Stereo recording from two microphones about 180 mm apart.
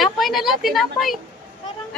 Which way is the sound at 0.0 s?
Centre (ahead or behind).